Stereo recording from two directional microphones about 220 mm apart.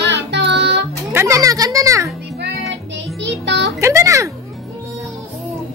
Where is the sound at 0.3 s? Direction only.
50° right (ahead or behind).